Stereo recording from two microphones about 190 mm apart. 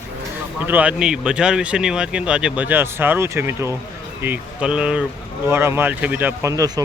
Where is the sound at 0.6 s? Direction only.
10° right (ahead or behind).